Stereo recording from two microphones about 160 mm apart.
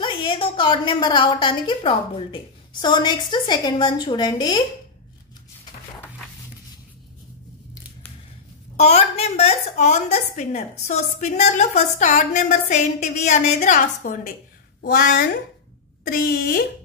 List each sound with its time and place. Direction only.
0.0 s a woman's voice: 30° left (ahead or behind)
8.7 s a woman's voice: 40° left (ahead or behind); by 16.6 s 60° left (ahead or behind)